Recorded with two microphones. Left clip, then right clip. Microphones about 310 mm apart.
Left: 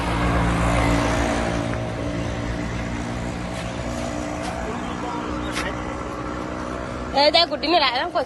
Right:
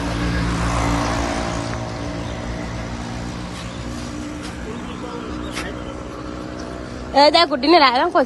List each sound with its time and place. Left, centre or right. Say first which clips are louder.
1.1 s music: even; right
7.1 s speech: right 4 dB; right